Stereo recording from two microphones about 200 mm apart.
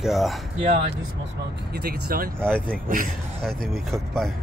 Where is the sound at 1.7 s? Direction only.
50° right (ahead or behind).